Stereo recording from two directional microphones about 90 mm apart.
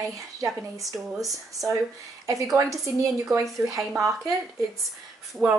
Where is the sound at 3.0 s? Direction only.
40° right (ahead or behind).